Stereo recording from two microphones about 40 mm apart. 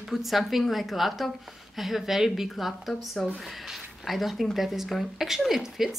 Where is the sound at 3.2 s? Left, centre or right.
Centre.